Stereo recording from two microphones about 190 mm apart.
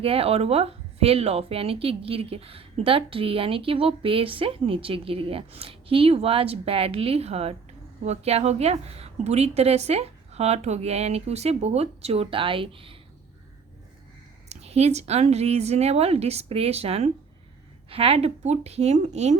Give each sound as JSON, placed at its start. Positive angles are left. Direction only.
{"t": 0.0, "sound": "a woman's voice", "side_deg": -30}
{"t": 14.5, "sound": "speech", "side_deg": -35}